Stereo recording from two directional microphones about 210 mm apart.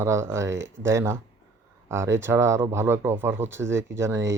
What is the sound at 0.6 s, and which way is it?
Speech, 60° right (ahead or behind).